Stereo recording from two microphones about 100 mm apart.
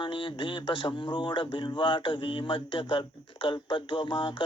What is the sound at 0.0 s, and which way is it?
A man's voice, 55° left (ahead or behind).